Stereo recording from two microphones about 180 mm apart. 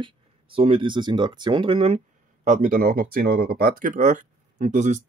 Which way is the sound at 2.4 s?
45° right (ahead or behind).